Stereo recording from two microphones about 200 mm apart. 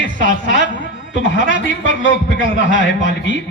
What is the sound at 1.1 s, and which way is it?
A man's voice, 65° left (ahead or behind).